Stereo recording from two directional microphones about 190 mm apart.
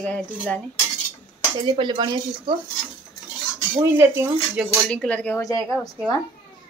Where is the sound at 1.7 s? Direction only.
25° right (ahead or behind).